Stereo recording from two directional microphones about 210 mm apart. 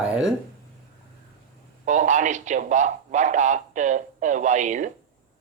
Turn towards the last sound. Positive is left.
turn(degrees=-35)  # may be behind; listen again after turning